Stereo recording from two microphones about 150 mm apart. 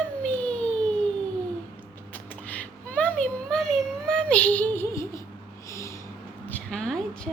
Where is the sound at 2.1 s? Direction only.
10° left (ahead or behind).